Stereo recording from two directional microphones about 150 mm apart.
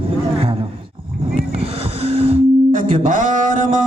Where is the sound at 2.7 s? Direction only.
60° right (ahead or behind).